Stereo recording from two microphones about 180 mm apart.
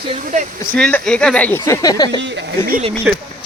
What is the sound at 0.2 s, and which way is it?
Speech, 45° right (ahead or behind).